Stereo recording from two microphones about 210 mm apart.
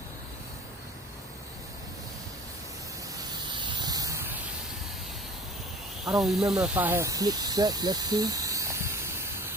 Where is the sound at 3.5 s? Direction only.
20° right (ahead or behind).